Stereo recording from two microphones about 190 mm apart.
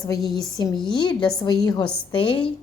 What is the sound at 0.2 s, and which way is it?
Speech, centre (ahead or behind).